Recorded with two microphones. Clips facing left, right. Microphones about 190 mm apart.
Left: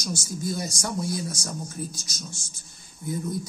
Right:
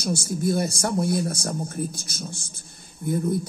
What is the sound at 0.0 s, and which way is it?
Speech, 60° right (ahead or behind).